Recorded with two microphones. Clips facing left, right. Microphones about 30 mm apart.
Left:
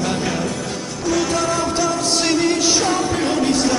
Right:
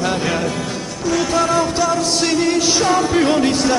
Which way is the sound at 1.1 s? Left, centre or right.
Centre.